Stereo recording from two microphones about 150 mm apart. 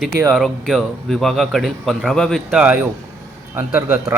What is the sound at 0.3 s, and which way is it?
A man's voice, centre (ahead or behind).